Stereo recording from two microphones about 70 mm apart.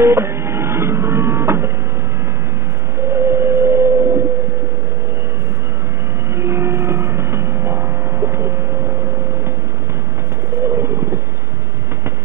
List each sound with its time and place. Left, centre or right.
0.0 s printer: right
3.1 s vehicle: right
6.3 s train: right
8.3 s vehicle: right
10.6 s bird: right